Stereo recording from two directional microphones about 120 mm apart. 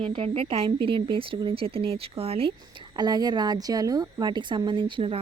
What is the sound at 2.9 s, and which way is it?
Speech, 35° right (ahead or behind).